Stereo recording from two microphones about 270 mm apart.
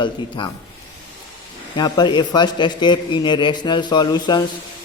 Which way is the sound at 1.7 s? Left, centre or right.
Centre.